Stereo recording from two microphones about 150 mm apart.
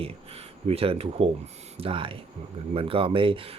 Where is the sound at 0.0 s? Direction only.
40° right (ahead or behind).